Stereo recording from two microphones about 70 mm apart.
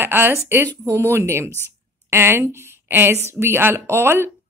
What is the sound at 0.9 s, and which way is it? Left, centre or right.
A woman's voice, right.